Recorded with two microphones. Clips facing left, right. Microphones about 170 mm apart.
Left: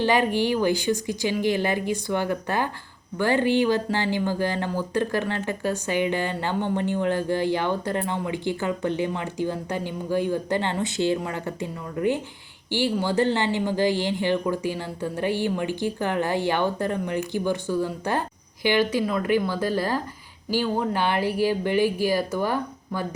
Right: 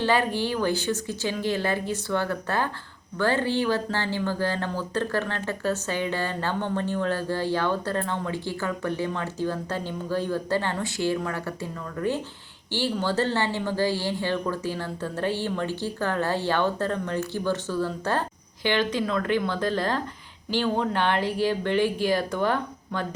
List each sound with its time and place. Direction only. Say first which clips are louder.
0.0 s speech: left 3 dB; 15° left (ahead or behind)